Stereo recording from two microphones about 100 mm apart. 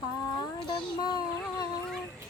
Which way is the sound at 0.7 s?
45° left (ahead or behind).